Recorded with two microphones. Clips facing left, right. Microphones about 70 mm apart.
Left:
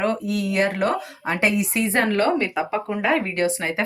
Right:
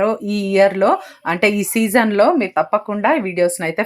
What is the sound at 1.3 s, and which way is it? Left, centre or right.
Speech, right.